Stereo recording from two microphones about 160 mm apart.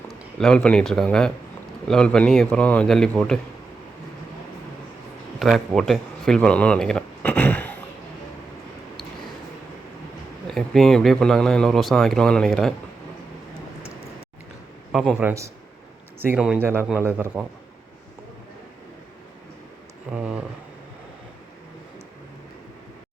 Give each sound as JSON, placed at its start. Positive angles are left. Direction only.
{"t": 0.3, "sound": "speech", "side_deg": 5}
{"t": 5.4, "sound": "speech", "side_deg": 0}
{"t": 10.4, "sound": "speech", "side_deg": 0}
{"t": 15.1, "sound": "speech", "side_deg": -15}
{"t": 20.1, "sound": "speech", "side_deg": -5}